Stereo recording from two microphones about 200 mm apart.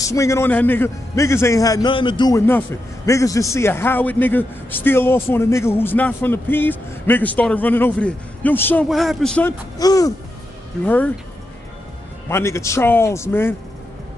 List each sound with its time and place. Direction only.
0.0 s a man's voice: 15° left (ahead or behind)
9.8 s a man's voice: 20° left (ahead or behind)
12.3 s a man's voice: 15° left (ahead or behind)